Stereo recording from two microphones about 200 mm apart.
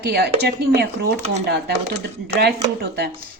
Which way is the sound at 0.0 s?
50° right (ahead or behind).